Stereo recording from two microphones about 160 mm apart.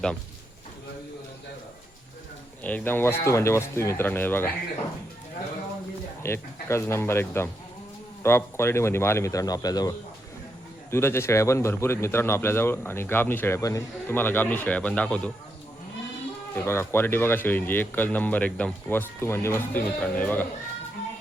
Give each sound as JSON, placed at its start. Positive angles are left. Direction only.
{"t": 2.6, "sound": "a man's voice", "side_deg": 10}
{"t": 6.2, "sound": "a man's voice", "side_deg": 15}
{"t": 10.9, "sound": "a man's voice", "side_deg": 15}
{"t": 16.6, "sound": "a man's voice", "side_deg": 15}